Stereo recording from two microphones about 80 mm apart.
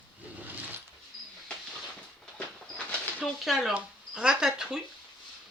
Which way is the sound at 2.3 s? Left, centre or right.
Centre.